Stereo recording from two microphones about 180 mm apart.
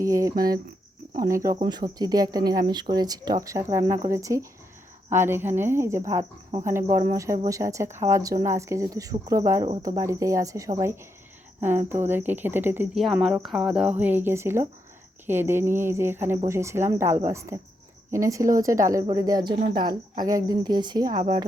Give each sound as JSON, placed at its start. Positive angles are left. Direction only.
{"t": 0.0, "sound": "cricket", "side_deg": -20}
{"t": 1.5, "sound": "speech", "side_deg": -25}
{"t": 5.0, "sound": "cricket", "side_deg": -15}
{"t": 19.1, "sound": "speech", "side_deg": -20}